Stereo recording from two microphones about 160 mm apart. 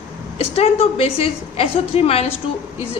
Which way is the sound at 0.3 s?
40° left (ahead or behind).